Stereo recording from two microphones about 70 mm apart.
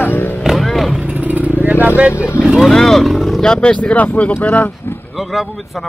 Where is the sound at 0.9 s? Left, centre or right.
Centre.